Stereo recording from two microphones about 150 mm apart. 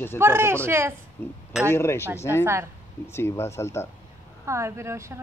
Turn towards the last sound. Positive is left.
turn(degrees=-20)  # may be behind; listen again after turning